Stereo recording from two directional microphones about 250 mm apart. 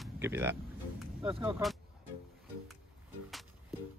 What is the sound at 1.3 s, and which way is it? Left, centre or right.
Speech, right.